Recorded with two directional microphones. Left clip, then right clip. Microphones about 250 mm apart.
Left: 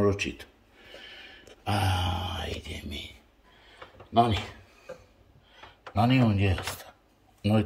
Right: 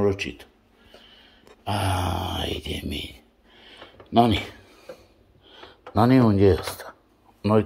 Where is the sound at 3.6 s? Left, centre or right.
Right.